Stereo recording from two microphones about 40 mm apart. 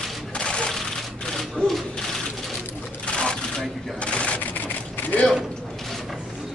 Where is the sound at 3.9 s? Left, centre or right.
Left.